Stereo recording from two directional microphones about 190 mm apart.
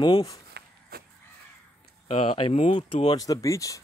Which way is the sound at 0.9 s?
55° right (ahead or behind).